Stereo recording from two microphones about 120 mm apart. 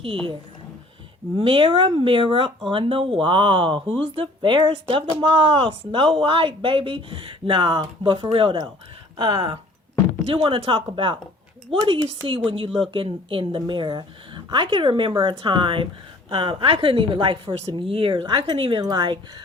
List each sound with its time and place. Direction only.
1.4 s speech: 45° right (ahead or behind)
10.2 s speech: 50° right (ahead or behind)